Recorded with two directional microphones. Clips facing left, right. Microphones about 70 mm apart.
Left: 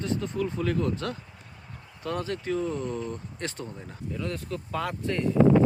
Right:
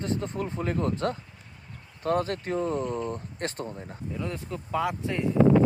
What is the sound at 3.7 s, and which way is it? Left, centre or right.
Speech, right.